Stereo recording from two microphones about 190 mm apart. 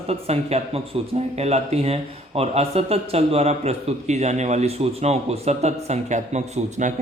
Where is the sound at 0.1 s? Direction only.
35° right (ahead or behind).